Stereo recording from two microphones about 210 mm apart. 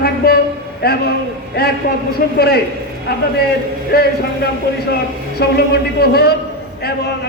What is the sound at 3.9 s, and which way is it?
A man's voice, 50° left (ahead or behind).